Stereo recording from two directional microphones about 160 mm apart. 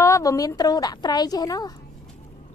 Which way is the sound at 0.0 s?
20° left (ahead or behind).